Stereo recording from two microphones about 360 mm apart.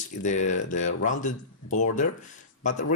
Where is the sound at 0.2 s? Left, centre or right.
Centre.